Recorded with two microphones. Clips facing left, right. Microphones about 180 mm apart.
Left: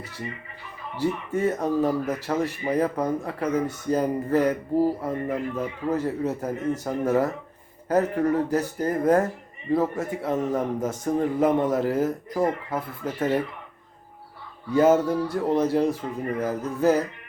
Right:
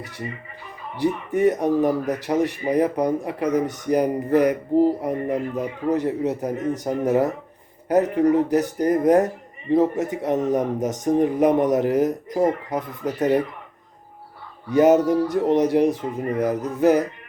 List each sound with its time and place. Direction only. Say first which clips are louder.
0.9 s a man's voice: right 4 dB; 15° right (ahead or behind)
14.7 s a man's voice: right 3 dB; 20° right (ahead or behind)